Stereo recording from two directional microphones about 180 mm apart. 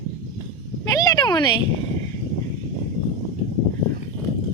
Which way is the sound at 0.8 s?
20° left (ahead or behind).